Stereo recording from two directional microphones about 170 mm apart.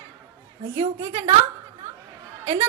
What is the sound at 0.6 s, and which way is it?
Speech, 30° right (ahead or behind).